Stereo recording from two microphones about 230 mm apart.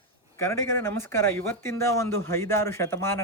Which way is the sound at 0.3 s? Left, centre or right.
Centre.